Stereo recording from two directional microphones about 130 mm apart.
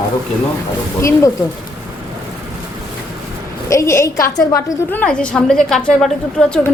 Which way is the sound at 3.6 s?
20° left (ahead or behind).